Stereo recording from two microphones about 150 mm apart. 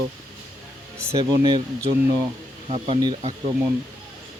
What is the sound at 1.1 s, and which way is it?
Speech, 30° right (ahead or behind).